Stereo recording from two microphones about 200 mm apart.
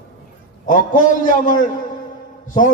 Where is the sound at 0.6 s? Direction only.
40° left (ahead or behind).